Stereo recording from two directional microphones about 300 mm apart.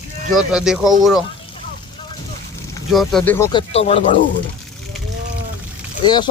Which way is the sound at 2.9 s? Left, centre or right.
Centre.